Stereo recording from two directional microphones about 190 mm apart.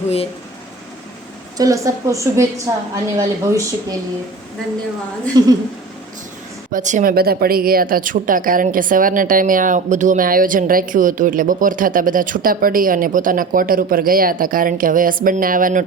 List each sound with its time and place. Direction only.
1.5 s speech: 15° right (ahead or behind)
5.4 s a woman's voice: 20° right (ahead or behind)
6.7 s a woman's voice: 45° right (ahead or behind)